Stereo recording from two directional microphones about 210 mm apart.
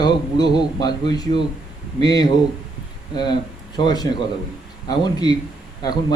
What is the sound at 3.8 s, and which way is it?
Speech, 20° left (ahead or behind).